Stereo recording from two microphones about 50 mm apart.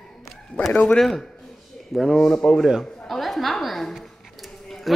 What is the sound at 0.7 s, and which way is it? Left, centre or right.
Speech, left.